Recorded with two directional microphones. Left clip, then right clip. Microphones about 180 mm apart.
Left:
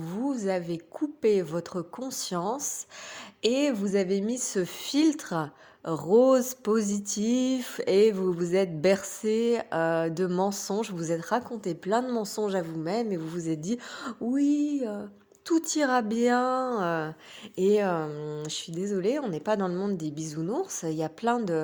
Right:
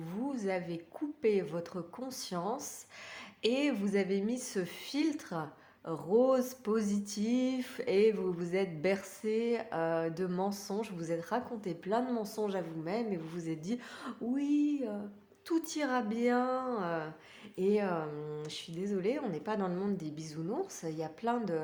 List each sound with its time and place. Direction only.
0.0 s a woman's voice: 40° left (ahead or behind)